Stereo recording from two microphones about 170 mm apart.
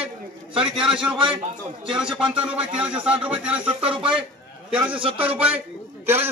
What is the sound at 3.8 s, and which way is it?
Speech, 35° right (ahead or behind).